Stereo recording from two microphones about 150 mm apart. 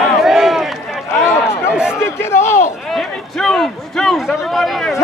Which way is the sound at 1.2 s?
15° left (ahead or behind).